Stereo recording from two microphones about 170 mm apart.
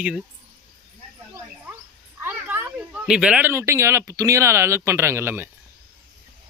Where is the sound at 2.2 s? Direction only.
10° right (ahead or behind).